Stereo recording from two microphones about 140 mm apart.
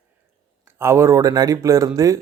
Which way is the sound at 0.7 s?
20° right (ahead or behind).